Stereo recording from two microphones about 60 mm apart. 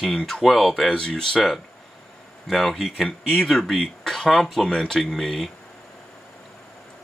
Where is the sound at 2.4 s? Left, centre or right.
Centre.